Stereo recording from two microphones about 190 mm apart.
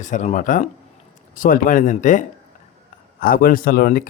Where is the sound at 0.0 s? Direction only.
40° left (ahead or behind).